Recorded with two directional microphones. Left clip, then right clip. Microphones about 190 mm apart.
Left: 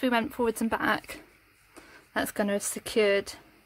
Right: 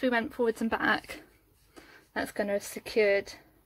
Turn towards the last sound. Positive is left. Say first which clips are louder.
# left 1 dB
turn(degrees=30)  # may be behind; listen again after turning